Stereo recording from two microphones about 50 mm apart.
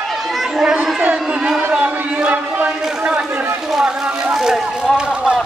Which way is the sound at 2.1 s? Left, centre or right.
Right.